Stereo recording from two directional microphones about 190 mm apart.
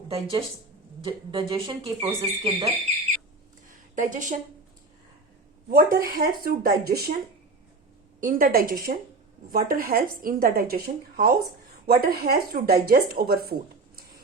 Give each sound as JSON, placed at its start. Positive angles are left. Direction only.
{"t": 0.1, "sound": "speech", "side_deg": -30}
{"t": 3.7, "sound": "a sound", "side_deg": -40}
{"t": 5.6, "sound": "speech", "side_deg": -50}
{"t": 8.2, "sound": "speech", "side_deg": -45}